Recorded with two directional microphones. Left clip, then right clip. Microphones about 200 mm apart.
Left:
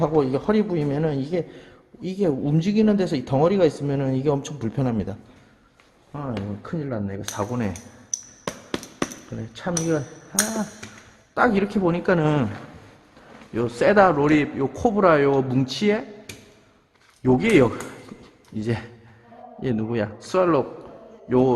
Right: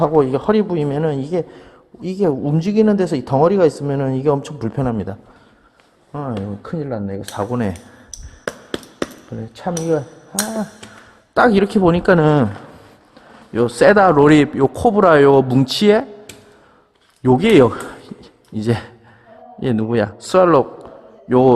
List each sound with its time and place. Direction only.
0.0 s a man's voice: 30° right (ahead or behind)
6.1 s speech: 50° right (ahead or behind)
6.6 s speech: 40° right (ahead or behind)
8.1 s a sound: centre (ahead or behind)
9.3 s a man's voice: 30° right (ahead or behind)
11.3 s a man's voice: 45° right (ahead or behind)
13.5 s a man's voice: 45° right (ahead or behind)
17.2 s a man's voice: 45° right (ahead or behind)
18.2 s a sound: 45° right (ahead or behind)
19.5 s a man's voice: 45° right (ahead or behind)